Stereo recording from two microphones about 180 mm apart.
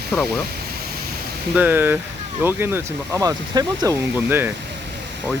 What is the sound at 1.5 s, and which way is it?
Speech, 10° right (ahead or behind).